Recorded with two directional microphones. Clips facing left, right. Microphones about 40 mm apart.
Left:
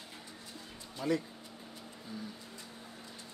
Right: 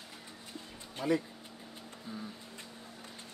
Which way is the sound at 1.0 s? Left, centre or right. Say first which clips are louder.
Right 2 dB; centre.